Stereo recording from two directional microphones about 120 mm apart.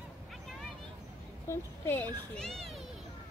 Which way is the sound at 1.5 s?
20° left (ahead or behind).